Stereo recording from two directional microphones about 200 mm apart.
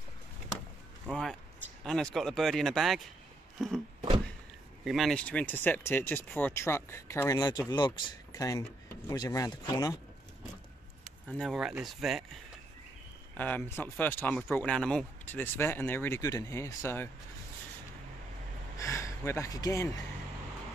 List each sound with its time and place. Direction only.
1.0 s speech: centre (ahead or behind)
3.5 s music: centre (ahead or behind)
4.8 s speech: centre (ahead or behind); by 9.9 s 15° left (ahead or behind)
11.2 s speech: centre (ahead or behind)
13.4 s speech: 10° left (ahead or behind)
18.8 s a sound: 15° left (ahead or behind)